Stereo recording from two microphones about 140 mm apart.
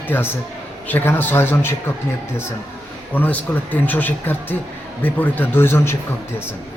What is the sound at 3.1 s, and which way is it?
A man's voice, 10° left (ahead or behind).